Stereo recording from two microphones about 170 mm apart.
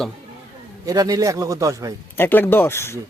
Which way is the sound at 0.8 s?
20° right (ahead or behind).